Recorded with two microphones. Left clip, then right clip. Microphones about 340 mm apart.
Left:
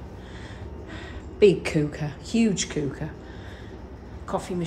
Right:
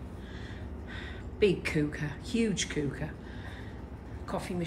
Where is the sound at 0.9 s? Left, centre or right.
Centre.